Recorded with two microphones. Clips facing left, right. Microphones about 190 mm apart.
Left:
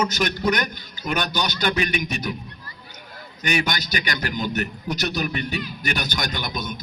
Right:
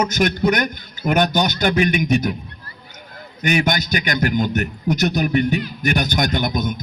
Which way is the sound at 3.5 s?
50° right (ahead or behind).